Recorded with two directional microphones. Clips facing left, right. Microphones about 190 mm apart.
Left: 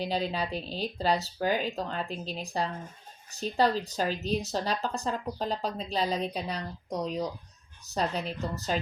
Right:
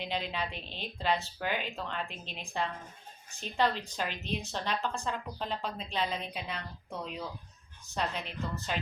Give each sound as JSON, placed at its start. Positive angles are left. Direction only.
{"t": 0.0, "sound": "a woman's voice", "side_deg": 35}